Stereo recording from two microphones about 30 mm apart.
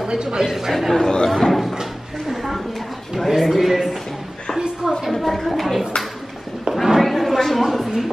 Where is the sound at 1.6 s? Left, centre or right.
Centre.